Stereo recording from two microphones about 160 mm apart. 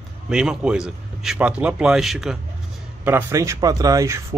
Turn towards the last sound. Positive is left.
turn(degrees=-20)  # may be behind; listen again after turning